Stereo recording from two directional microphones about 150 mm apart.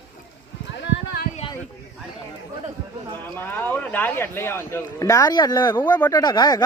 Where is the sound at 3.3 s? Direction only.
10° left (ahead or behind); by 6.6 s 30° left (ahead or behind).